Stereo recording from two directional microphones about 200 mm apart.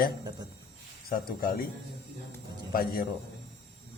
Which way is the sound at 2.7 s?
45° left (ahead or behind).